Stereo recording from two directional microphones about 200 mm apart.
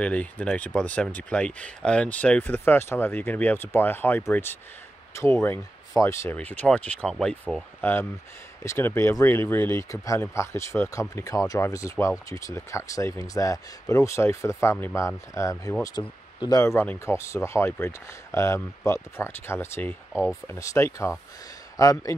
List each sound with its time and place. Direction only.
0.0 s speech: 5° left (ahead or behind)